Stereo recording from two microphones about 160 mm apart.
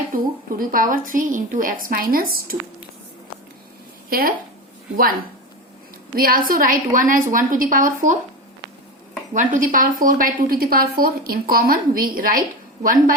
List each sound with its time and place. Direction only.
0.1 s a woman's voice: 60° right (ahead or behind)
4.1 s a woman's voice: 65° right (ahead or behind)
6.1 s a woman's voice: 65° right (ahead or behind)
9.3 s a woman's voice: 55° right (ahead or behind)